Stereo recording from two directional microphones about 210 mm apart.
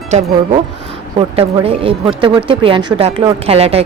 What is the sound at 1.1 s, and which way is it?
Speech, 25° right (ahead or behind).